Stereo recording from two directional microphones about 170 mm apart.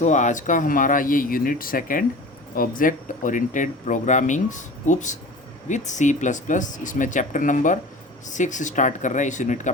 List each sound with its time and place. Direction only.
0.0 s speech: 45° left (ahead or behind)